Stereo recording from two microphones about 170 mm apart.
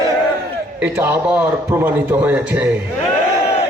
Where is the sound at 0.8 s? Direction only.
10° right (ahead or behind).